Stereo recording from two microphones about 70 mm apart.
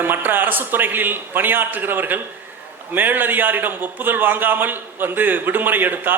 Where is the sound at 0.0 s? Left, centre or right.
Right.